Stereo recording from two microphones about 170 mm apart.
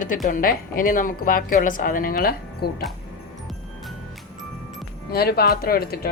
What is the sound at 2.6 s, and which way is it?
Speech, 70° left (ahead or behind).